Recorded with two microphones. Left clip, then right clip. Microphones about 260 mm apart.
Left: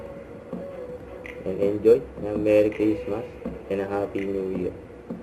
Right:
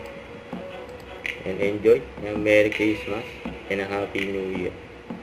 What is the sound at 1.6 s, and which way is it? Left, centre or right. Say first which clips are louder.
Speech: left 1 dB; right.